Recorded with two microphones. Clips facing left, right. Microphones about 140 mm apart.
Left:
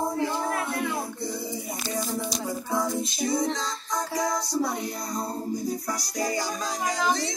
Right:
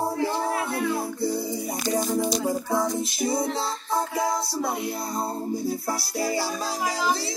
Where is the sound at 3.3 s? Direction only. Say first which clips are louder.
Right 1 dB; 30° right (ahead or behind).